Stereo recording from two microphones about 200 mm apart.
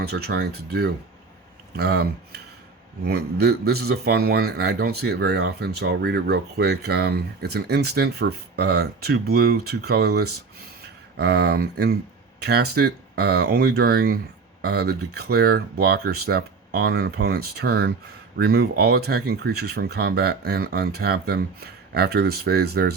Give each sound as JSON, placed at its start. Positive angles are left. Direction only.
{"t": 0.0, "sound": "speech", "side_deg": -50}